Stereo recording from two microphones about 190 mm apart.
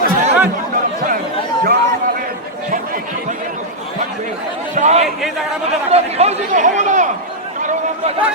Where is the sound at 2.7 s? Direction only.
45° right (ahead or behind).